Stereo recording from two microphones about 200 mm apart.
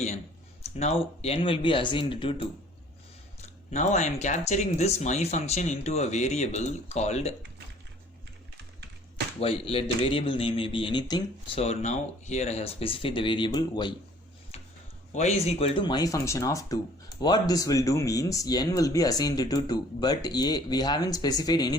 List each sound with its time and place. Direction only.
0.6 s speech: 30° left (ahead or behind)
3.4 s speech: 35° left (ahead or behind)
9.4 s speech: 30° left (ahead or behind)
15.1 s speech: 35° left (ahead or behind)